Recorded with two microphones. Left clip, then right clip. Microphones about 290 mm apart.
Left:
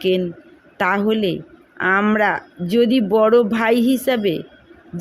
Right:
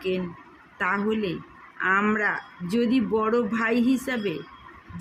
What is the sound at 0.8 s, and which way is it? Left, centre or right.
Speech, left.